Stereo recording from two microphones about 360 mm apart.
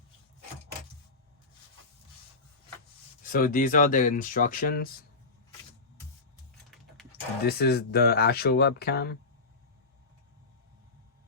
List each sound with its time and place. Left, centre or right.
3.2 s speech: left
7.4 s speech: left